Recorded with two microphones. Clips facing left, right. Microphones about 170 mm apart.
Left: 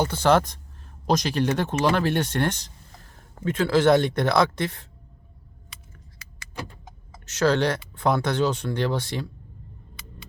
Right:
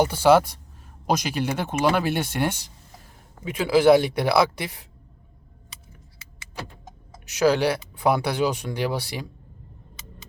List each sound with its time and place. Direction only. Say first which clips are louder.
0.0 s speech: right 3 dB; 10° right (ahead or behind)
7.3 s speech: right 1 dB; 10° right (ahead or behind)